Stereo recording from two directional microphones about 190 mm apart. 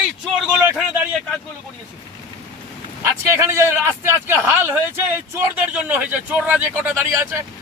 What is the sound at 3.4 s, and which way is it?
A man's voice, 15° right (ahead or behind).